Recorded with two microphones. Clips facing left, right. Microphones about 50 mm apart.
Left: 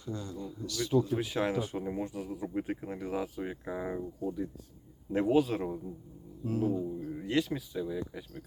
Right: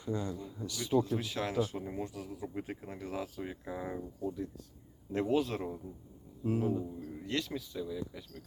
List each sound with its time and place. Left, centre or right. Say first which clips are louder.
0.0 s speech: right 2 dB; right
1.2 s speech: left 2 dB; centre
6.4 s speech: left 1 dB; centre
7.1 s speech: left 6 dB; centre